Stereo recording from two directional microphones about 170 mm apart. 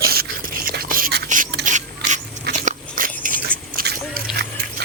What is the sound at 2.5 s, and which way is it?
Biting, 50° right (ahead or behind).